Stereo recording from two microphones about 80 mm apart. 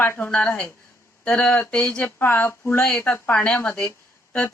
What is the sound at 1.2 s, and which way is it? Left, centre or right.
Speech, centre.